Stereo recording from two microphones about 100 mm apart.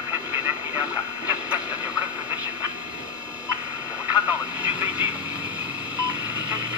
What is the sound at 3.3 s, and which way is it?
Vehicle, 15° right (ahead or behind).